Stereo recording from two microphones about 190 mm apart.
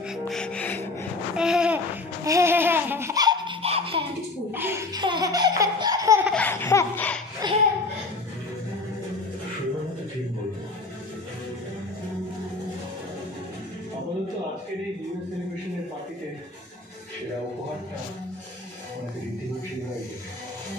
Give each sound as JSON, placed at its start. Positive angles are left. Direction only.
{"t": 0.1, "sound": "music", "side_deg": 5}
{"t": 1.3, "sound": "babbling", "side_deg": -5}
{"t": 2.2, "sound": "laughter", "side_deg": -15}
{"t": 4.5, "sound": "laughter", "side_deg": -10}
{"t": 6.3, "sound": "laughter", "side_deg": 10}
{"t": 7.4, "sound": "a sound", "side_deg": -20}